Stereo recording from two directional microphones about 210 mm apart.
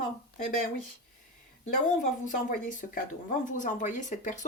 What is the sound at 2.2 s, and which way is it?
Speech, 40° left (ahead or behind).